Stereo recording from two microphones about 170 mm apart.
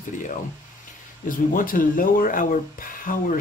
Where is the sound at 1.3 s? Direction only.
55° left (ahead or behind).